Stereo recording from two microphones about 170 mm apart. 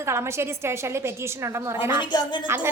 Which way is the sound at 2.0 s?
25° left (ahead or behind).